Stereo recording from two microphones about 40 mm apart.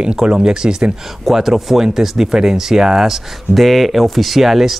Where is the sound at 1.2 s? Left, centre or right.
Centre.